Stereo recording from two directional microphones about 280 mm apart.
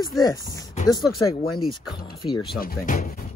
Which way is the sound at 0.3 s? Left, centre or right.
Centre.